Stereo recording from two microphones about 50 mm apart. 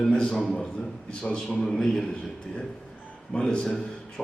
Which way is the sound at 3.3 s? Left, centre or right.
Centre.